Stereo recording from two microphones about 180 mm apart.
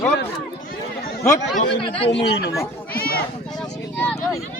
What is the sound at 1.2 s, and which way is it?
Speech, 15° left (ahead or behind).